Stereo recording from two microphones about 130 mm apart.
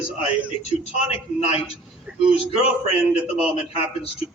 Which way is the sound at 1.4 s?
55° left (ahead or behind).